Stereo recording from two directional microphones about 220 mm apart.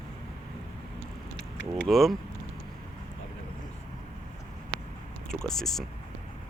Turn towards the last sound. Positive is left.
turn(degrees=0)  # may be behind; listen again after turning